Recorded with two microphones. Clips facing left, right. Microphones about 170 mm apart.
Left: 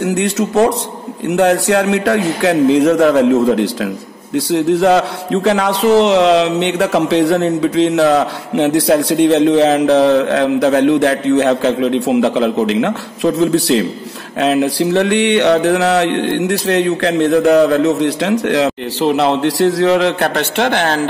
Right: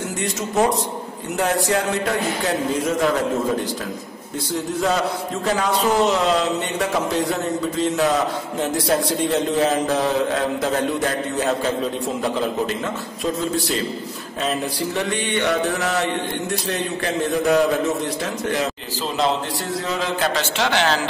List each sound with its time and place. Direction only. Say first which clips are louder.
0.0 s a man's voice: left 10 dB; 70° left (ahead or behind); by 21.1 s 50° left (ahead or behind)